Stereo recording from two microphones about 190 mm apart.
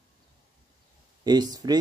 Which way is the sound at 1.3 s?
20° right (ahead or behind).